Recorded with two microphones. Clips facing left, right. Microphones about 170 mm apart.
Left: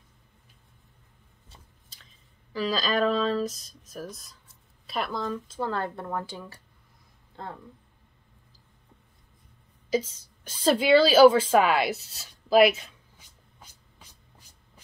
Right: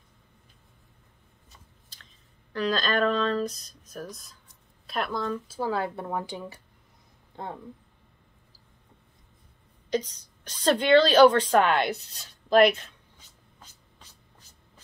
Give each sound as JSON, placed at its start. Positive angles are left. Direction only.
{"t": 2.5, "sound": "speech", "side_deg": 5}
{"t": 9.8, "sound": "a woman's voice", "side_deg": 5}